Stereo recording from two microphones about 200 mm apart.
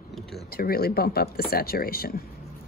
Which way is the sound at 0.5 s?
50° left (ahead or behind).